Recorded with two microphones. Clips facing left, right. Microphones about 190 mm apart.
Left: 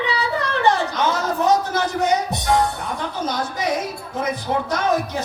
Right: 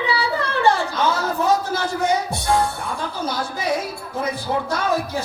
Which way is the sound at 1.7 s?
20° left (ahead or behind).